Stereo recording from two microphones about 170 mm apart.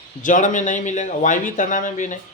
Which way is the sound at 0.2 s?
50° left (ahead or behind).